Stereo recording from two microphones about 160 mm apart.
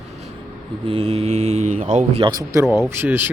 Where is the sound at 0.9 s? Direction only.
40° right (ahead or behind).